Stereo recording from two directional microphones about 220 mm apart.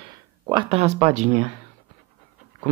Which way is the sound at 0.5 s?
25° right (ahead or behind).